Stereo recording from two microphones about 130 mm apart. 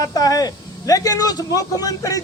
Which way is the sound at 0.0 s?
30° left (ahead or behind).